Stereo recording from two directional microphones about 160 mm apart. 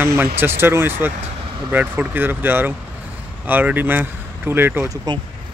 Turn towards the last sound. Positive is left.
turn(degrees=-15)  # may be behind; listen again after turning